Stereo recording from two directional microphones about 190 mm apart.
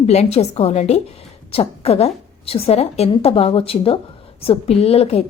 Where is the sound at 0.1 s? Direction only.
35° left (ahead or behind).